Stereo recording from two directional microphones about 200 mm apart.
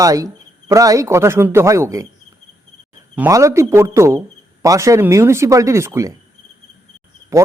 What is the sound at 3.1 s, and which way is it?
A man's voice, 15° right (ahead or behind).